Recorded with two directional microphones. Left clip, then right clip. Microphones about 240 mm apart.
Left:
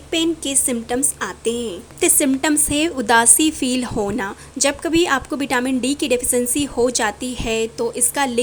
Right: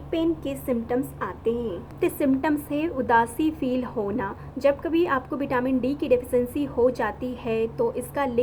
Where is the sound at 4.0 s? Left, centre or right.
Left.